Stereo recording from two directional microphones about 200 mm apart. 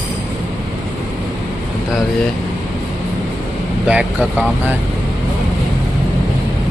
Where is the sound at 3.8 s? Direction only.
5° right (ahead or behind).